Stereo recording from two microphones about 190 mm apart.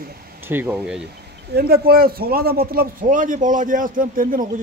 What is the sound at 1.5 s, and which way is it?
A man's voice, 55° right (ahead or behind).